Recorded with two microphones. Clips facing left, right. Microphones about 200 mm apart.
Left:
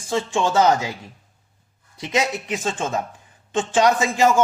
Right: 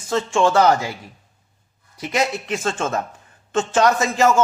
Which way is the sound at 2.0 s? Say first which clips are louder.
Right 1 dB; 20° left (ahead or behind).